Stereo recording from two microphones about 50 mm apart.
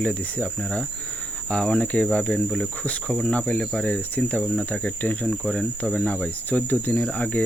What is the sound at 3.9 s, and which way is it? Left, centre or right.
Cricket, left.